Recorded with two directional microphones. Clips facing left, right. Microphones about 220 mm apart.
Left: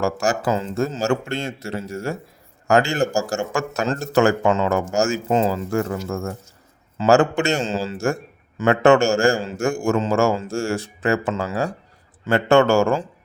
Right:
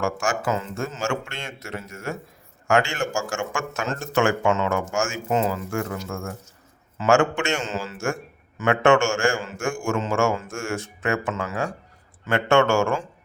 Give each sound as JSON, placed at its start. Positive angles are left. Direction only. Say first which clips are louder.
{"t": 0.0, "sound": "a man's voice", "louder": "left 4 dB", "side_deg": 35}